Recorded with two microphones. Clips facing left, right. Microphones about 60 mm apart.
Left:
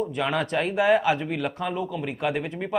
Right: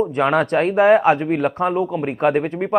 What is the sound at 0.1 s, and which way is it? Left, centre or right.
Speech, right.